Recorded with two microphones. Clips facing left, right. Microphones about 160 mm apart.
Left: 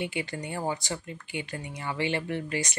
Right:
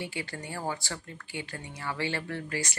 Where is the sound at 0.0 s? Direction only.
20° left (ahead or behind).